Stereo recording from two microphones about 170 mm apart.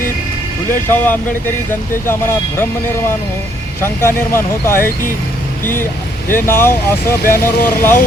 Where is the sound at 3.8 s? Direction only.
15° left (ahead or behind).